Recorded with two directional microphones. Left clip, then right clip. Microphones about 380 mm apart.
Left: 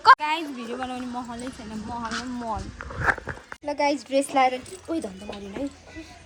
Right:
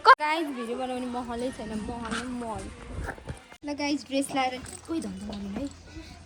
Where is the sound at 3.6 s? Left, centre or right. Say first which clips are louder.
Left 7 dB; centre.